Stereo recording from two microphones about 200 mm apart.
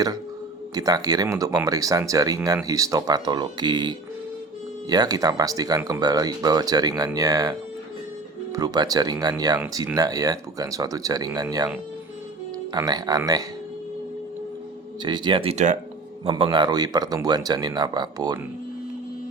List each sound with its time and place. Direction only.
0.7 s speech: 20° right (ahead or behind)
8.5 s speech: 20° right (ahead or behind)
15.0 s speech: 25° right (ahead or behind)
16.2 s speech: 25° right (ahead or behind)